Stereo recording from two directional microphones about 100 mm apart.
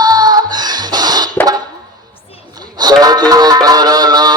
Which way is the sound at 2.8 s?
40° right (ahead or behind).